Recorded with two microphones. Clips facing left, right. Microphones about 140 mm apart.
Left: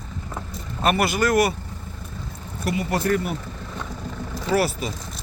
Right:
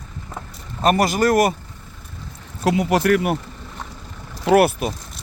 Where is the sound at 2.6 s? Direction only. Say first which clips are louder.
Right 6 dB; 90° right.